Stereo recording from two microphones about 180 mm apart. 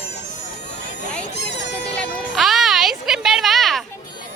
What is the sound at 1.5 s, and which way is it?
Music, 75° left (ahead or behind).